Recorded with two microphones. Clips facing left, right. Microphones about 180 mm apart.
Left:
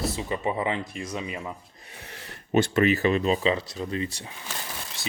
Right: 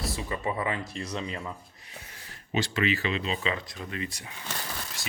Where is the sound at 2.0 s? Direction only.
70° left (ahead or behind); by 3.4 s 45° left (ahead or behind).